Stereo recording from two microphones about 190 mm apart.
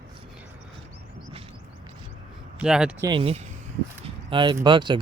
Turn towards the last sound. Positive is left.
turn(degrees=-25)  # may be behind; listen again after turning